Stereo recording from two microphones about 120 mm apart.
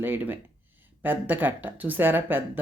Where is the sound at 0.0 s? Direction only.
15° right (ahead or behind).